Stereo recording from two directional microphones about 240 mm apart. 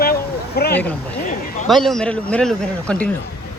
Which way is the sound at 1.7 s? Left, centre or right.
Centre.